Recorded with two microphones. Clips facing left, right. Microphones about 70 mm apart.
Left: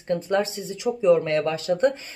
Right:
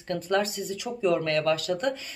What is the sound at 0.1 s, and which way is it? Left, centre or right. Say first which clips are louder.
Speech: left 3 dB; left.